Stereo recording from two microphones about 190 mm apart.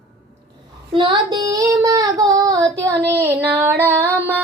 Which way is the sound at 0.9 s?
25° right (ahead or behind).